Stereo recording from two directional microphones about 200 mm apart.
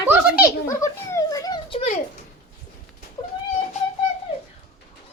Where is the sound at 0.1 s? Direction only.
10° right (ahead or behind).